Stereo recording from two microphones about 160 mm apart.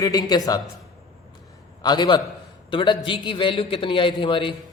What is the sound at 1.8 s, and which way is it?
A man's voice, 25° left (ahead or behind).